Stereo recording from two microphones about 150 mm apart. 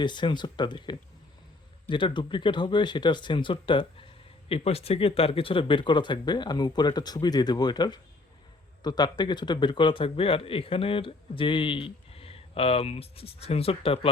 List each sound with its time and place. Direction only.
0.0 s a man's voice: 30° left (ahead or behind)